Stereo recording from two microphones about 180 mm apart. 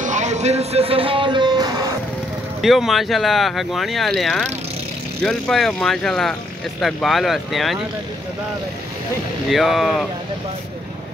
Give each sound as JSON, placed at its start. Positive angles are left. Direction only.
{"t": 0.0, "sound": "music", "side_deg": -40}
{"t": 2.6, "sound": "speech", "side_deg": 0}
{"t": 9.5, "sound": "speech", "side_deg": 0}